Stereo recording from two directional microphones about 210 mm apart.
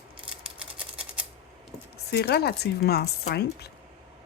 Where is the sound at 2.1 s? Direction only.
50° left (ahead or behind).